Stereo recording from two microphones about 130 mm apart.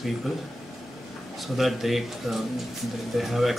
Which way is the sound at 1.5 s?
Centre (ahead or behind).